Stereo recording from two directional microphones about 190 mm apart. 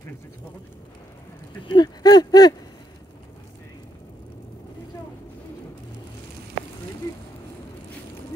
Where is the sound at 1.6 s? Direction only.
20° left (ahead or behind).